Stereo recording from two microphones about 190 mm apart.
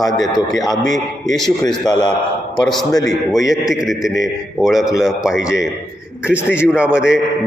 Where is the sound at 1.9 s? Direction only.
20° left (ahead or behind).